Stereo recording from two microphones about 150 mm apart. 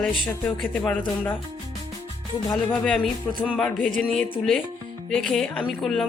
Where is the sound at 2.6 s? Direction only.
5° left (ahead or behind).